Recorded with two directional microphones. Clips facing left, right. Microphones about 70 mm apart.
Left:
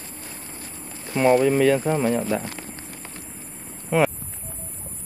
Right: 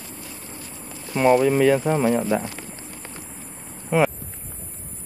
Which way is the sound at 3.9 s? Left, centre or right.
Centre.